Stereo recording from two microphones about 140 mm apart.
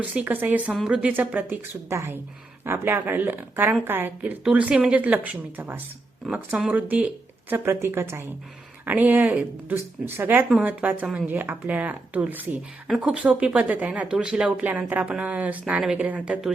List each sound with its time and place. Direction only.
0.0 s speech: 10° right (ahead or behind)